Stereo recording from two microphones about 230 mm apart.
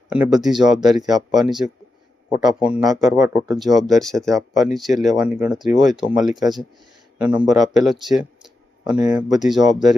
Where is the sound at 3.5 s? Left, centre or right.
Centre.